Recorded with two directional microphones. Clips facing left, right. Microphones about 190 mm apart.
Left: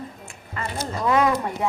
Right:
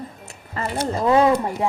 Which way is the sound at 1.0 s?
30° right (ahead or behind).